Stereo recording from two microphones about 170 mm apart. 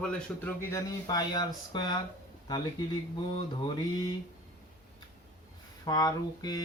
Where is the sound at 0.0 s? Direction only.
10° left (ahead or behind).